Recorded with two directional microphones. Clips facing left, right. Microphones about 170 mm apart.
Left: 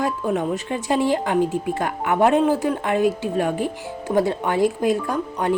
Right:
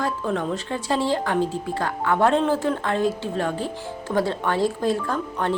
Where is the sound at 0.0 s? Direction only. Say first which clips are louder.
Left 3 dB; 15° left (ahead or behind).